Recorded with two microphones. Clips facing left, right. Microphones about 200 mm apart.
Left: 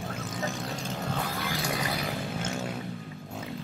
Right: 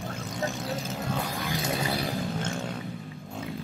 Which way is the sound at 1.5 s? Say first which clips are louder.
Right 4 dB; 20° right (ahead or behind).